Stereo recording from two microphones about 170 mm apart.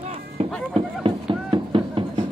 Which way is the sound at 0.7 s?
30° right (ahead or behind).